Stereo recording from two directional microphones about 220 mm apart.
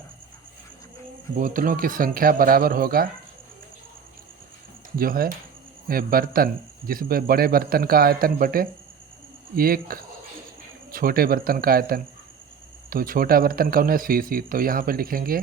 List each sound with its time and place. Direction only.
1.4 s speech: 40° right (ahead or behind)
4.9 s speech: 40° right (ahead or behind)